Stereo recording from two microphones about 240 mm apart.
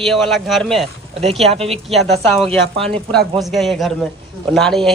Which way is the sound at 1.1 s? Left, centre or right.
Right.